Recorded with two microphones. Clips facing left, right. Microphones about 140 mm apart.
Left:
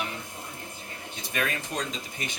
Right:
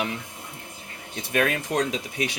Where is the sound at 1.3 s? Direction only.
65° right (ahead or behind).